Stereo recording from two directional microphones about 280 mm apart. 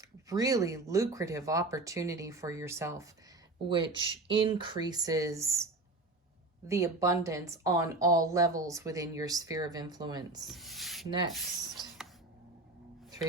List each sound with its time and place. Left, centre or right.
0.3 s speech: centre
6.7 s speech: centre
10.4 s speech: centre